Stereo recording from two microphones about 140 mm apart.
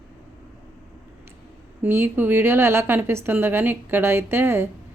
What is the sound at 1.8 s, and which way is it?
A woman's voice, 15° right (ahead or behind).